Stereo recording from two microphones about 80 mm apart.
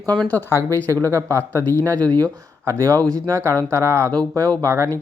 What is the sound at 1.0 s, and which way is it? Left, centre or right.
Speech, right.